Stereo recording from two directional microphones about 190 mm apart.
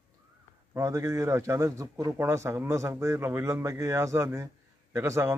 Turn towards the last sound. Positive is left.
turn(degrees=-15)  # may be behind; listen again after turning